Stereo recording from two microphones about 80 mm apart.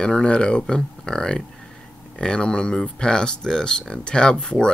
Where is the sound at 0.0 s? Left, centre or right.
Centre.